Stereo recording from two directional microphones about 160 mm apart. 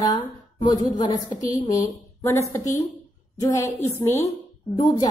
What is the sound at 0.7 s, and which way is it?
A woman's voice, 25° left (ahead or behind).